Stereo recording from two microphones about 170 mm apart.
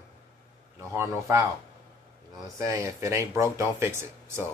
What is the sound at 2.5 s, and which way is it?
Speech, 20° right (ahead or behind).